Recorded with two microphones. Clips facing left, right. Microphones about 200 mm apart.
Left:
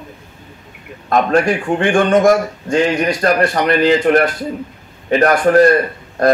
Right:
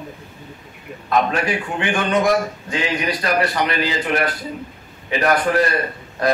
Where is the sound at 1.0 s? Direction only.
45° left (ahead or behind).